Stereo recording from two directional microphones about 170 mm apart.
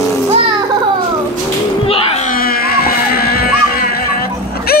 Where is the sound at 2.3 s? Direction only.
60° left (ahead or behind).